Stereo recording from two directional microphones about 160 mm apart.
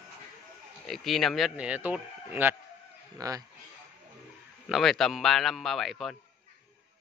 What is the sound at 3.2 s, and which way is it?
Speech, 20° right (ahead or behind).